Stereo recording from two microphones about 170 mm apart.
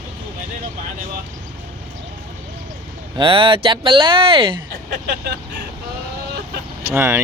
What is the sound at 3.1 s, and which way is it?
Speech, 30° right (ahead or behind).